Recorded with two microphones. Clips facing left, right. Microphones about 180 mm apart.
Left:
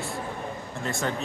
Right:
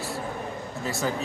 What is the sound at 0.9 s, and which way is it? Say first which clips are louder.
Speech: right 1 dB; 5° right (ahead or behind).